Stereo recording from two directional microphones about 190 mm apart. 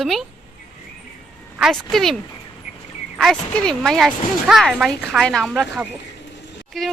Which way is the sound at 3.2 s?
5° left (ahead or behind).